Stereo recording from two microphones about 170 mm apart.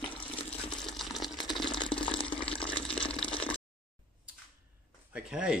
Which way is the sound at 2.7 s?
5° left (ahead or behind).